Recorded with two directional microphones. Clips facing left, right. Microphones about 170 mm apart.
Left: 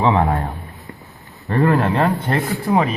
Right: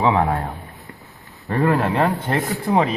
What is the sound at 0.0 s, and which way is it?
Speech, centre (ahead or behind).